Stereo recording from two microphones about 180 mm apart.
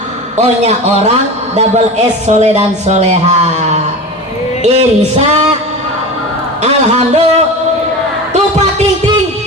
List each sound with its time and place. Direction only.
0.3 s speech: 40° right (ahead or behind)
6.6 s speech: 35° right (ahead or behind)